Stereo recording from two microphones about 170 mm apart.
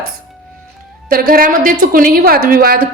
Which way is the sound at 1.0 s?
60° right (ahead or behind).